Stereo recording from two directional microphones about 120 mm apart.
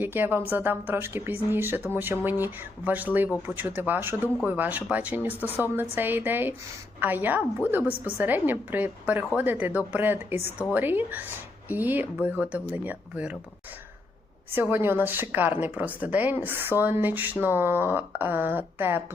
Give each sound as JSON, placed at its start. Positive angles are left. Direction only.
{"t": 0.0, "sound": "a woman's voice", "side_deg": -15}
{"t": 14.5, "sound": "a woman's voice", "side_deg": -20}